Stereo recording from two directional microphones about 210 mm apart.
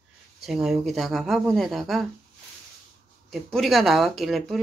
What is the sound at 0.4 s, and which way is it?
Speech, centre (ahead or behind).